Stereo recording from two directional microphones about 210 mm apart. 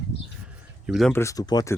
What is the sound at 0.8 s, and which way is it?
Speech, centre (ahead or behind).